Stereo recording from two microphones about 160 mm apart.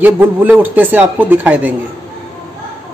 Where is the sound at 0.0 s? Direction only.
10° right (ahead or behind).